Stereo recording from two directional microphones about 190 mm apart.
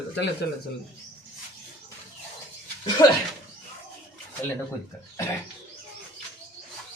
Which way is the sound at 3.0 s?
20° left (ahead or behind).